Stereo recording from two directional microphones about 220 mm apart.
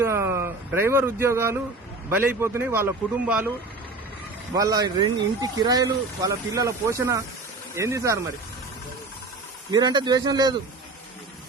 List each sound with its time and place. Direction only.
0.0 s a sound: 10° right (ahead or behind)
2.0 s speech: 10° right (ahead or behind)
4.5 s speech: 15° right (ahead or behind)
9.7 s speech: 20° right (ahead or behind)